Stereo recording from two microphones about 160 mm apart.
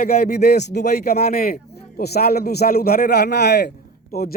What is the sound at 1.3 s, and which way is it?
A man's voice, 70° left (ahead or behind).